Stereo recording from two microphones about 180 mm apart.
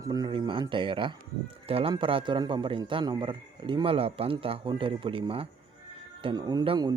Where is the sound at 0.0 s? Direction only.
20° right (ahead or behind).